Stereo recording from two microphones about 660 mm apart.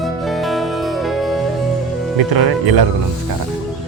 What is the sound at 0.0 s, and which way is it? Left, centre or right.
Music, centre.